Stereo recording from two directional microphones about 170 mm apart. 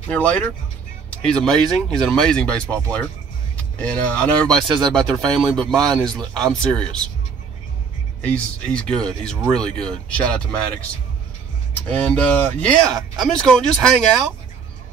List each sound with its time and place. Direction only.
0.1 s speech: 5° left (ahead or behind)
8.2 s speech: 5° left (ahead or behind)
11.9 s speech: 10° left (ahead or behind)